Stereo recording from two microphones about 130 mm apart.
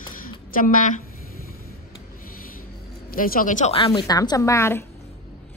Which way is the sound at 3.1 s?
90° left.